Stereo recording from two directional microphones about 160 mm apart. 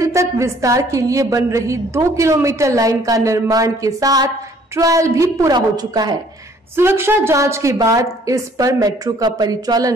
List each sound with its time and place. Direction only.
0.0 s a woman's voice: 20° right (ahead or behind)
6.8 s a woman's voice: 15° right (ahead or behind)